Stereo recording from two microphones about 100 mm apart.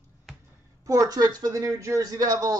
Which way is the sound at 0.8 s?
40° right (ahead or behind).